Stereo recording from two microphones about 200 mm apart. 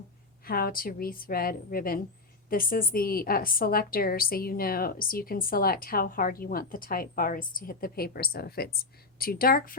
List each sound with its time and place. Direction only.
0.4 s a woman's voice: 50° left (ahead or behind)